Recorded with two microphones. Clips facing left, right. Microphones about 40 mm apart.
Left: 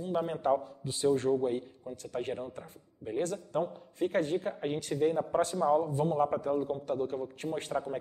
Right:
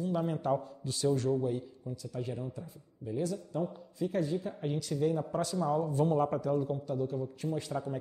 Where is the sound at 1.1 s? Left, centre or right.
Left.